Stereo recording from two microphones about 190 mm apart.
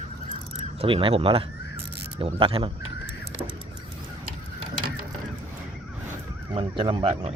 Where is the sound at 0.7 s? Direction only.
30° right (ahead or behind).